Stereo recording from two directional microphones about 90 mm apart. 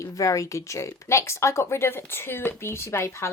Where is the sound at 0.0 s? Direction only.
35° left (ahead or behind).